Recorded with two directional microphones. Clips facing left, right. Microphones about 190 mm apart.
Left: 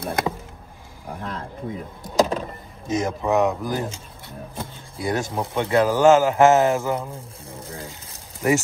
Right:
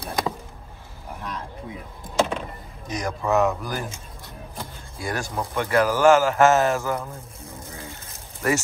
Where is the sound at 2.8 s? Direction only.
25° left (ahead or behind).